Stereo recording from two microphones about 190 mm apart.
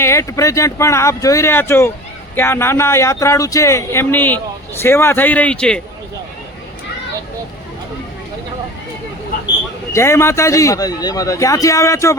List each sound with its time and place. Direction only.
0.0 s a man's voice: 15° left (ahead or behind)
9.9 s a man's voice: 15° left (ahead or behind)